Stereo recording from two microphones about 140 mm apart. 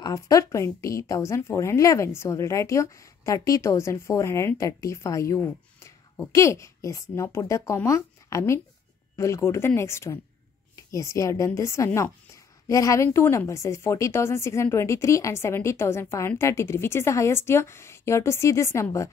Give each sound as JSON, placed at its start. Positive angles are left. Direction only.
{"t": 0.0, "sound": "a woman's voice", "side_deg": 25}